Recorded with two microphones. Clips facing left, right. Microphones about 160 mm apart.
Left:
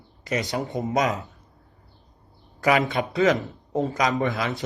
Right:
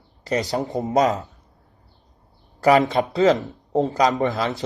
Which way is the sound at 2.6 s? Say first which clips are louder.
Right 5 dB; 35° right (ahead or behind).